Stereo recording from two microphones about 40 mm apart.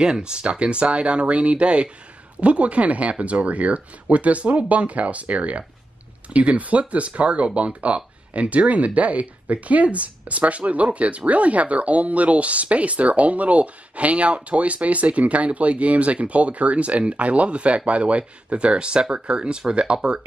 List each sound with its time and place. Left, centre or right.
0.0 s speech: right